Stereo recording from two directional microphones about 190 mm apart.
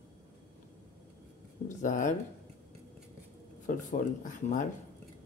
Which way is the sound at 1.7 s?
40° left (ahead or behind).